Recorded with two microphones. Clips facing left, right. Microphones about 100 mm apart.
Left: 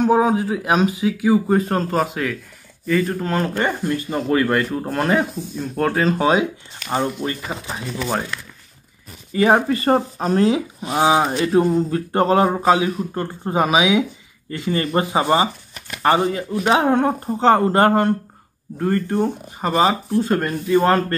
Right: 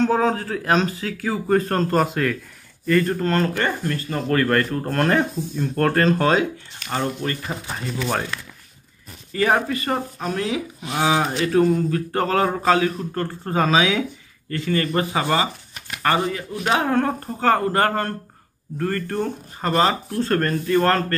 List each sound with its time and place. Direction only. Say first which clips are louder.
0.0 s speech: left 3 dB; 15° left (ahead or behind)
3.5 s speech: left 3 dB; 15° left (ahead or behind)
9.3 s speech: left 4 dB; 20° left (ahead or behind)
9.7 s speech: left 7 dB; 35° left (ahead or behind); by 21.0 s 10° left (ahead or behind)